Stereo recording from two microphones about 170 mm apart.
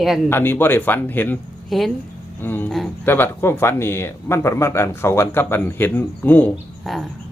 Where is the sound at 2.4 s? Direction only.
10° left (ahead or behind).